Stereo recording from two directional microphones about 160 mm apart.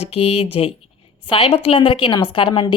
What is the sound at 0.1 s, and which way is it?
A woman's voice, 35° left (ahead or behind).